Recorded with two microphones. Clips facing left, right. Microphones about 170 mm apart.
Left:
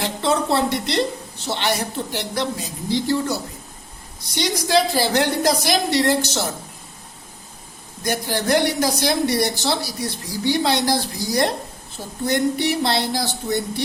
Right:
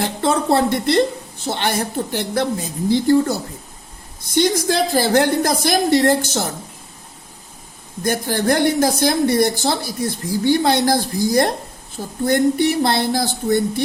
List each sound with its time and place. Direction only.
0.0 s a sound: 50° right (ahead or behind)
1.5 s speech: 50° right (ahead or behind)
4.4 s speech: 50° right (ahead or behind)
8.0 s speech: 50° right (ahead or behind)